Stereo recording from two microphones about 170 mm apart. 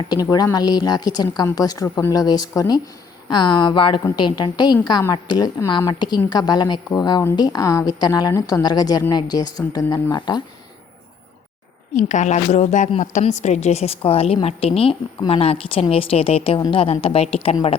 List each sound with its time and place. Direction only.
0.3 s a woman's voice: 20° left (ahead or behind)
11.9 s a woman's voice: 45° left (ahead or behind)